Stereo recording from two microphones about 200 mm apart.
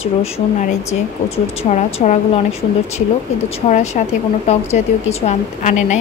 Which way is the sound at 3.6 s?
35° left (ahead or behind).